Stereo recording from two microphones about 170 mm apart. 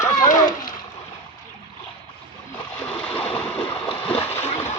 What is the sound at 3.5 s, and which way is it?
Boat, 10° left (ahead or behind).